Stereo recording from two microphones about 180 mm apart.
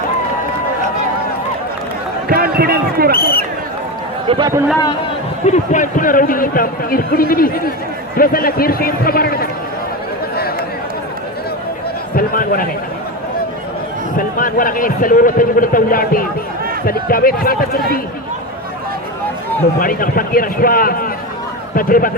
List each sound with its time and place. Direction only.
2.3 s speech: 55° right (ahead or behind)
3.1 s a man's voice: 55° left (ahead or behind)
4.3 s a man's voice: 25° right (ahead or behind)
5.5 s a man's voice: 45° left (ahead or behind)
12.1 s a sound: 55° left (ahead or behind)
14.2 s a man's voice: 50° left (ahead or behind)
19.8 s a man's voice: 50° left (ahead or behind)